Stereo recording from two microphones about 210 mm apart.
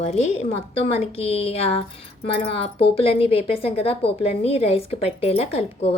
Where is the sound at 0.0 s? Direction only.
30° left (ahead or behind).